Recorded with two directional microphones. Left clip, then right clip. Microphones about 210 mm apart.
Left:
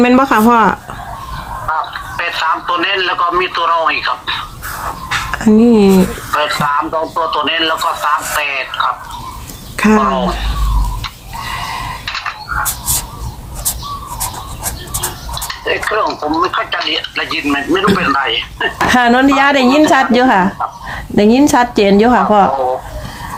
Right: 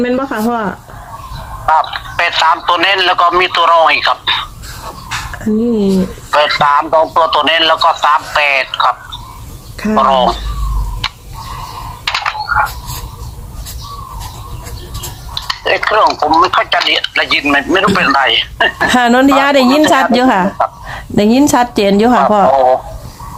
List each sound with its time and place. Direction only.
0.0 s speech: 25° left (ahead or behind)
1.7 s speech: 45° right (ahead or behind)
6.3 s speech: 45° right (ahead or behind)
9.7 s speech: 25° left (ahead or behind)
10.1 s speech: 45° right (ahead or behind)
11.0 s tick-tock: 45° right (ahead or behind)
12.0 s a sound: 45° right (ahead or behind)
15.4 s speech: 45° right (ahead or behind)
18.9 s a woman's voice: 10° right (ahead or behind)